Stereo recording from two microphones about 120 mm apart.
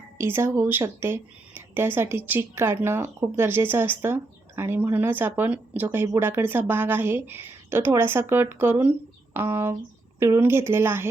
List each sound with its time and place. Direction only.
0.2 s speech: 20° right (ahead or behind)